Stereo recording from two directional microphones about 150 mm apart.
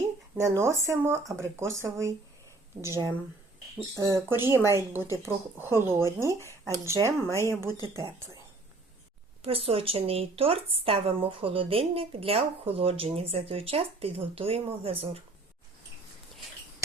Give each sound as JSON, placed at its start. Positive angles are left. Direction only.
{"t": 0.4, "sound": "speech", "side_deg": -20}
{"t": 3.9, "sound": "speech", "side_deg": -20}
{"t": 6.2, "sound": "speech", "side_deg": 20}
{"t": 6.7, "sound": "speech", "side_deg": -20}
{"t": 9.4, "sound": "speech", "side_deg": -40}